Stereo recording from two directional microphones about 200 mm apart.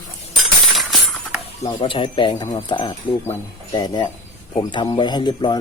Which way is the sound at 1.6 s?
25° left (ahead or behind).